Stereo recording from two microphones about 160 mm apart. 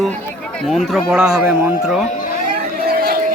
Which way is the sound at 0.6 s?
Centre (ahead or behind).